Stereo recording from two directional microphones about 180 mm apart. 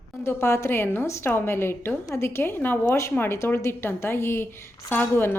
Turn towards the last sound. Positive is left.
turn(degrees=10)  # may be behind; listen again after turning